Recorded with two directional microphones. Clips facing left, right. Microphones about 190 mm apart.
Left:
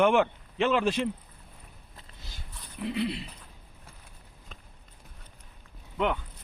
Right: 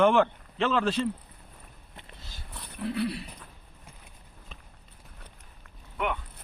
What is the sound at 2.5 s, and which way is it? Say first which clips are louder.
Dog: right 4 dB; 65° right (ahead or behind).